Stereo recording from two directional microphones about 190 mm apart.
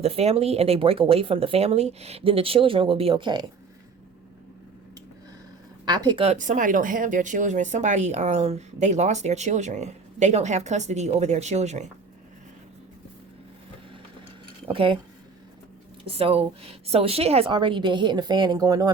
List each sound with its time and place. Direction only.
0.0 s speech: 35° right (ahead or behind)
5.8 s speech: 20° right (ahead or behind)
14.7 s a woman's voice: 25° right (ahead or behind)
16.0 s a woman's voice: 30° right (ahead or behind)